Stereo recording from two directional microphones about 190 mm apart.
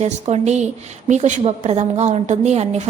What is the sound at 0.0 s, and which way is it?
A woman's voice, 35° right (ahead or behind).